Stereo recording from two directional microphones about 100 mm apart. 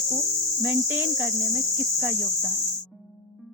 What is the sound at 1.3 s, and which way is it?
Cricket, 25° right (ahead or behind).